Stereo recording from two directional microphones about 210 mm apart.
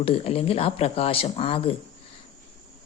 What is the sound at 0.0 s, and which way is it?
Speech, 30° left (ahead or behind).